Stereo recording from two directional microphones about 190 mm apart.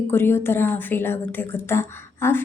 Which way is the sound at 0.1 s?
10° left (ahead or behind).